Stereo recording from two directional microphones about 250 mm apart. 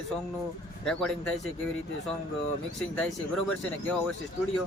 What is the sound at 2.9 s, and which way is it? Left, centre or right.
Speech, centre.